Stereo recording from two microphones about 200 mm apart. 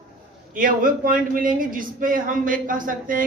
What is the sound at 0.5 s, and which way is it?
A man's voice, 45° right (ahead or behind).